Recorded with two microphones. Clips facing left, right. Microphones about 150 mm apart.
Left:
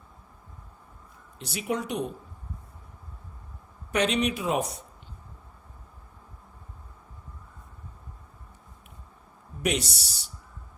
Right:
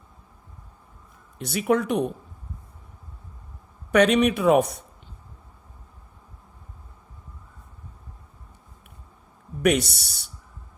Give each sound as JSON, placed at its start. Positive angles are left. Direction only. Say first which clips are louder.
{"t": 1.5, "sound": "speech", "louder": "right 8 dB", "side_deg": -60}
{"t": 3.9, "sound": "speech", "louder": "right 7 dB", "side_deg": -55}
{"t": 9.6, "sound": "speech", "louder": "right 7 dB", "side_deg": -60}